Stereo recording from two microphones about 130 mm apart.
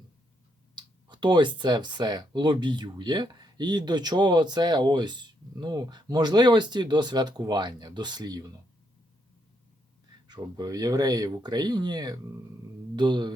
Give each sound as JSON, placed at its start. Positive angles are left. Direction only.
{"t": 0.8, "sound": "speech", "side_deg": -35}
{"t": 10.2, "sound": "speech", "side_deg": -35}